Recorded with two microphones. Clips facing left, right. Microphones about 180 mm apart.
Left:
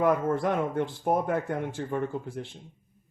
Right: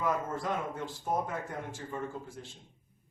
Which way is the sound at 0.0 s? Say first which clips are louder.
Left 8 dB; 60° left (ahead or behind).